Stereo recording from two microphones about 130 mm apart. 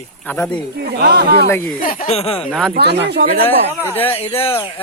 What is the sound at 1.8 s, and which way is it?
Speech, 90° left.